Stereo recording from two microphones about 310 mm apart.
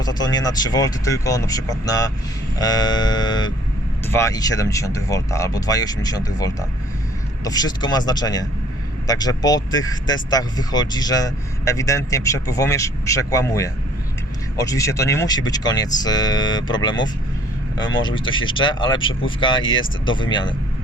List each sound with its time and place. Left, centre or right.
0.0 s speech: centre